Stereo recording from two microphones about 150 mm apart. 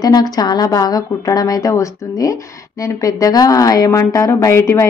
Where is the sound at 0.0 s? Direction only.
25° left (ahead or behind).